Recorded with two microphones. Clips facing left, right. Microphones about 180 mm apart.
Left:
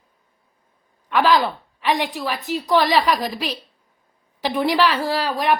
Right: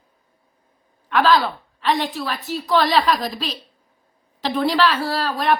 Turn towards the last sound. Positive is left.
turn(degrees=15)  # may be behind; listen again after turning